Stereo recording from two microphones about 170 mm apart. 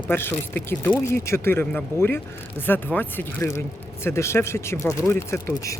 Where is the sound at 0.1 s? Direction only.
10° left (ahead or behind).